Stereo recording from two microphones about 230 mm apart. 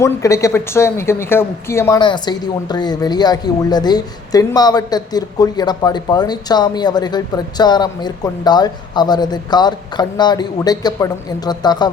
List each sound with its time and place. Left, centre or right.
0.0 s speech: centre